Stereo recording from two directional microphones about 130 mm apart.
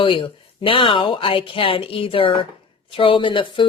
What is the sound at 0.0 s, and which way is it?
A woman's voice, 40° left (ahead or behind).